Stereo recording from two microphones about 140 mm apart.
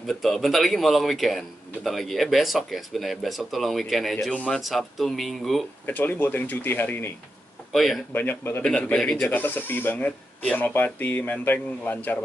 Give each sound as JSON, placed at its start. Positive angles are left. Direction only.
{"t": 0.0, "sound": "a man's voice", "side_deg": 0}
{"t": 5.9, "sound": "speech", "side_deg": 15}
{"t": 7.7, "sound": "speech", "side_deg": 0}
{"t": 8.1, "sound": "speech", "side_deg": 15}
{"t": 8.6, "sound": "speech", "side_deg": 5}